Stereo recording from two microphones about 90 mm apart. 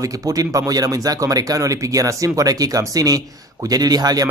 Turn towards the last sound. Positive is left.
turn(degrees=-45)  # may be behind; listen again after turning